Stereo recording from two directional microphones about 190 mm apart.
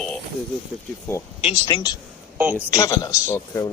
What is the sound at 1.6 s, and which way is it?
Speech, 20° left (ahead or behind).